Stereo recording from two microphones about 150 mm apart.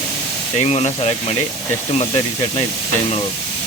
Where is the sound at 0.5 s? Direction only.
45° left (ahead or behind).